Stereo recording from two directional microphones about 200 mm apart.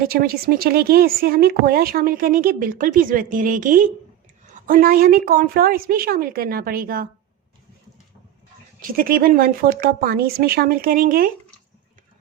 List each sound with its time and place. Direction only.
0.1 s speech: 50° right (ahead or behind)
8.8 s speech: 45° right (ahead or behind)